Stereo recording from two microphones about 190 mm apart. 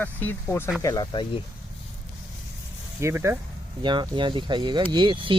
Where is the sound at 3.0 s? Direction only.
15° right (ahead or behind).